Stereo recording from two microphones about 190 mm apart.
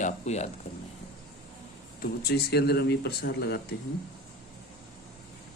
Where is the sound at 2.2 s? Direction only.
60° left (ahead or behind).